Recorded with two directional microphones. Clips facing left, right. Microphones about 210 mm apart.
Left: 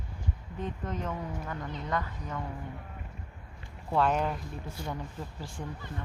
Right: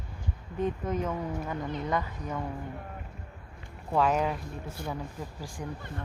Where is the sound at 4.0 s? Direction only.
5° right (ahead or behind).